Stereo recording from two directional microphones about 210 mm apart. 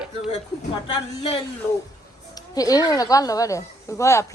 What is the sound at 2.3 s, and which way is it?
A woman's voice, 15° left (ahead or behind).